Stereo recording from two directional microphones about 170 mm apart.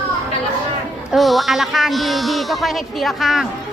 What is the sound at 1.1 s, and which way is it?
A woman's voice, centre (ahead or behind).